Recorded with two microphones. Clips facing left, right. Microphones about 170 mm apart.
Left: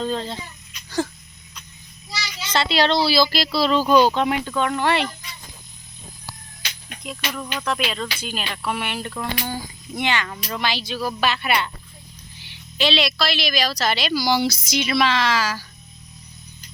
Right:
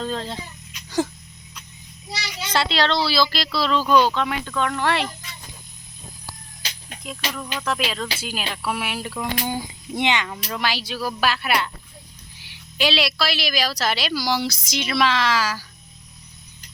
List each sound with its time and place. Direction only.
0.0 s speech: centre (ahead or behind)
0.7 s a sound: 15° right (ahead or behind)
2.6 s speech: 10° left (ahead or behind)
7.3 s speech: centre (ahead or behind)
9.4 s speech: 20° right (ahead or behind)
10.2 s speech: 5° right (ahead or behind)